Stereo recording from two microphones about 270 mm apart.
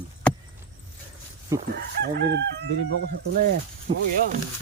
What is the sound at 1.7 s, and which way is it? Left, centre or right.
Speech, right.